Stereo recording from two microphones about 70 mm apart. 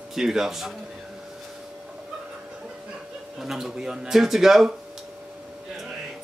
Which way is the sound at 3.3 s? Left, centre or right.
Centre.